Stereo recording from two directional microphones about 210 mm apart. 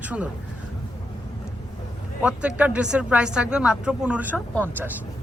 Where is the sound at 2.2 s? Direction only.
5° right (ahead or behind).